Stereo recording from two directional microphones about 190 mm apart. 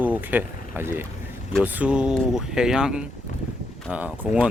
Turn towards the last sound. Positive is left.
turn(degrees=-5)  # may be behind; listen again after turning